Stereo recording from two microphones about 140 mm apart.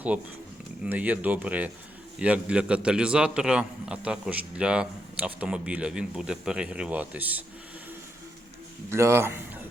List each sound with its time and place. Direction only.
0.9 s a man's voice: 10° right (ahead or behind)
8.9 s a man's voice: 20° right (ahead or behind)